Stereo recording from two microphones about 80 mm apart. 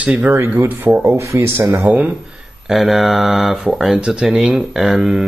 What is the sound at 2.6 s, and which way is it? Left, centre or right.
Speech, centre.